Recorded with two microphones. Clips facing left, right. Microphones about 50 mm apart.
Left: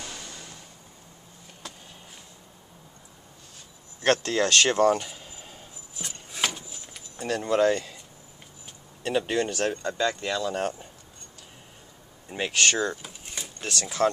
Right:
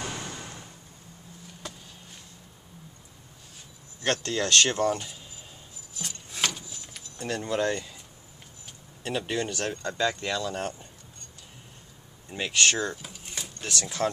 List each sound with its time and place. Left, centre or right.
0.0 s a sound: right
4.1 s speech: centre
4.9 s a sound: left
6.9 s keys jangling: centre
9.2 s speech: centre
12.3 s speech: centre